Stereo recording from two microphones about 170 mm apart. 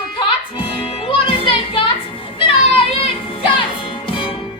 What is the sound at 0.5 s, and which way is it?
Music, 30° left (ahead or behind).